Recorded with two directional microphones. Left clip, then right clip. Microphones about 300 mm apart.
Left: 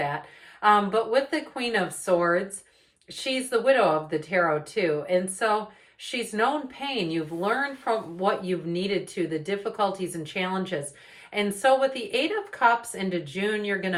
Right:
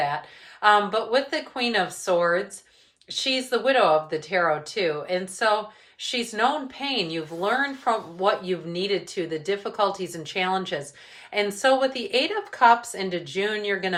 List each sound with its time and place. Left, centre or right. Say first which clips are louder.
0.6 s a woman's voice: right 1 dB; centre